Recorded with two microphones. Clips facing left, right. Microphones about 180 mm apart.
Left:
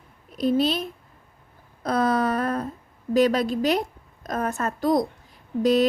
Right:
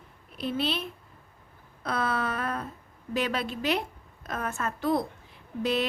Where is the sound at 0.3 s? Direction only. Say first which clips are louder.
Left 8 dB; 40° left (ahead or behind).